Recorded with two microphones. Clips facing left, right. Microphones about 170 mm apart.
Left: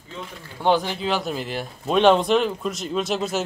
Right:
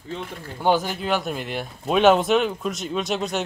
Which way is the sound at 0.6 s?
5° right (ahead or behind).